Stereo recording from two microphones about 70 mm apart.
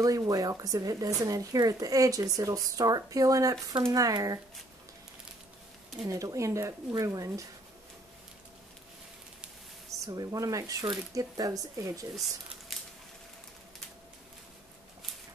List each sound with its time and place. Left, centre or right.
0.0 s speech: right
6.0 s speech: right
9.8 s a woman's voice: right
12.7 s a sound: centre